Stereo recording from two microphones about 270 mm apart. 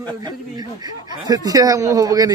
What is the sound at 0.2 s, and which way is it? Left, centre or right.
Speech, centre.